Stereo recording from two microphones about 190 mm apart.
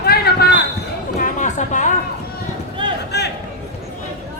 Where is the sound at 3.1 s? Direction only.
60° left (ahead or behind).